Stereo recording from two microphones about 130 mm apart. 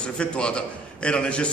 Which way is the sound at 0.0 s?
5° left (ahead or behind).